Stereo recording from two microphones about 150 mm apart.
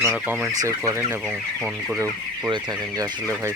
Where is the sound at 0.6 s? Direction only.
20° right (ahead or behind).